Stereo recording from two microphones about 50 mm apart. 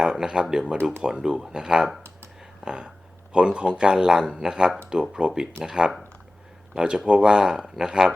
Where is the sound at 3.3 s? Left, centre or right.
Right.